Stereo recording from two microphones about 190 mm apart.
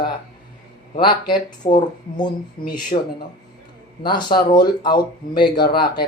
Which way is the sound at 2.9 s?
35° left (ahead or behind).